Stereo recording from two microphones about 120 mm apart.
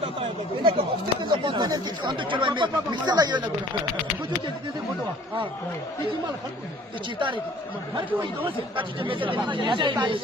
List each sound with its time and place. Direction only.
0.0 s a sound: 50° right (ahead or behind)
1.2 s speech: 40° right (ahead or behind)
7.9 s speech: 45° right (ahead or behind)